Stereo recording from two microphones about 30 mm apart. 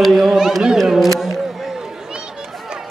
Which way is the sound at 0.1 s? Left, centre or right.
Centre.